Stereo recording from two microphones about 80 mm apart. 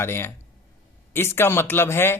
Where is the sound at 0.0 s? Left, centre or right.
Left.